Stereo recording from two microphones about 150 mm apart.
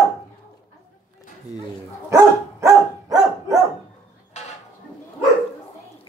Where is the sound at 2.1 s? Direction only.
20° right (ahead or behind).